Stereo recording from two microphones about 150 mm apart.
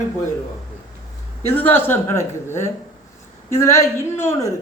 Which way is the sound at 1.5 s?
15° left (ahead or behind).